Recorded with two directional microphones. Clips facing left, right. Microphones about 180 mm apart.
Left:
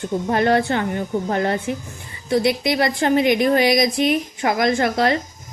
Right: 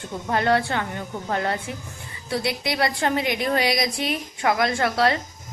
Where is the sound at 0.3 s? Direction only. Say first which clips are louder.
Left 3 dB; 25° left (ahead or behind).